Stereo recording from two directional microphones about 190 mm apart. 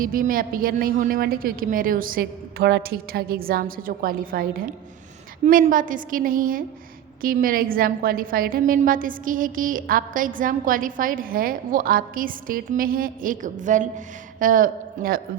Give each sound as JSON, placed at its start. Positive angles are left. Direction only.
{"t": 0.0, "sound": "a woman's voice", "side_deg": -45}